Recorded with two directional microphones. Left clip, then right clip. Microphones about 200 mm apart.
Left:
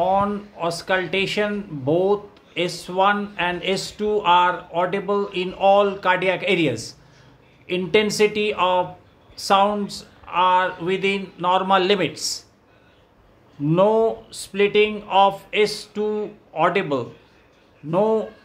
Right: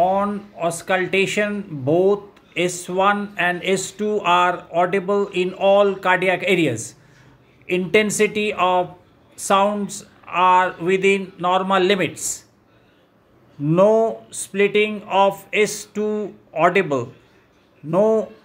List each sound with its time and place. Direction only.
0.0 s speech: 5° right (ahead or behind)
13.7 s speech: 10° right (ahead or behind)